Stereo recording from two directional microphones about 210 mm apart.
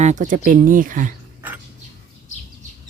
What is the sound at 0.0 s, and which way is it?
Speech, 35° right (ahead or behind).